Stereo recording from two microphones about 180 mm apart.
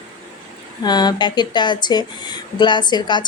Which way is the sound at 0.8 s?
25° left (ahead or behind).